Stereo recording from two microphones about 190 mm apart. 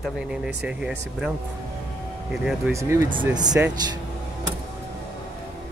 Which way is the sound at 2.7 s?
15° right (ahead or behind).